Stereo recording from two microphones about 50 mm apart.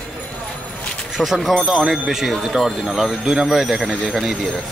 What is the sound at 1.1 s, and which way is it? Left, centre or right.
Speech, centre.